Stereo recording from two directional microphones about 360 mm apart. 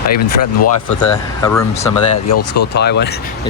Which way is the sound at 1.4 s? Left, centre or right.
Centre.